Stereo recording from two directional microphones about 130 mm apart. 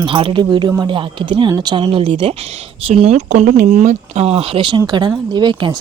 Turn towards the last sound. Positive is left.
turn(degrees=-35)  # may be behind; listen again after turning